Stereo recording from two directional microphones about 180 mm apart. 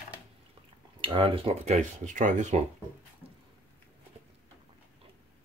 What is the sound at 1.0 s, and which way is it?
Speech, 30° right (ahead or behind).